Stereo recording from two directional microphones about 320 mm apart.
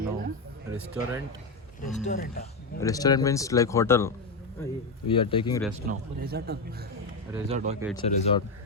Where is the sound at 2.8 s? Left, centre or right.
Centre.